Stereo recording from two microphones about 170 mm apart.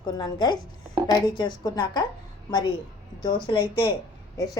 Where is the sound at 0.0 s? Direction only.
25° left (ahead or behind).